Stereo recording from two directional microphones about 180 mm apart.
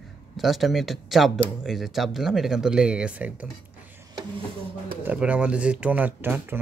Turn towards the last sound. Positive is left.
turn(degrees=-10)  # may be behind; listen again after turning